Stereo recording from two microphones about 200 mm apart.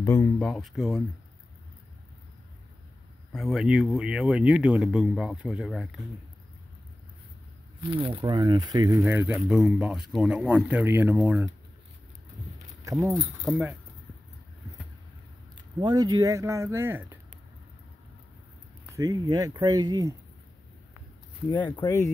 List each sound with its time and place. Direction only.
0.0 s speech: 15° left (ahead or behind)
0.4 s speech: centre (ahead or behind)
3.3 s speech: centre (ahead or behind)
7.8 s speech: 25° right (ahead or behind); by 11.5 s 5° right (ahead or behind)
13.4 s speech: centre (ahead or behind)
15.8 s speech: 20° right (ahead or behind)
18.9 s speech: 15° right (ahead or behind)
21.6 s speech: 20° left (ahead or behind)